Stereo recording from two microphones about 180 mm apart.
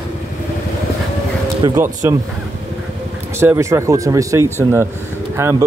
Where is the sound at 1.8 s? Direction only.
15° right (ahead or behind).